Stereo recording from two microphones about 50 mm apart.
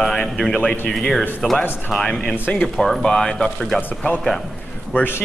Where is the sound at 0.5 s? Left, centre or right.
Left.